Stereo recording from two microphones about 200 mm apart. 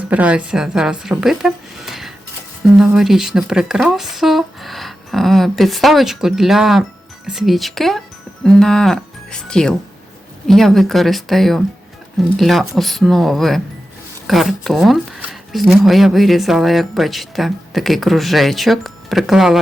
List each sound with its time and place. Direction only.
0.1 s speech: 5° right (ahead or behind)